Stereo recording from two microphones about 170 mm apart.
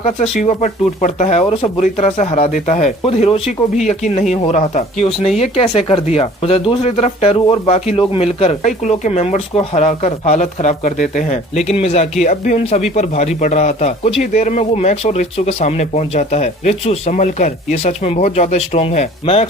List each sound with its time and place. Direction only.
0.0 s speech: 40° left (ahead or behind)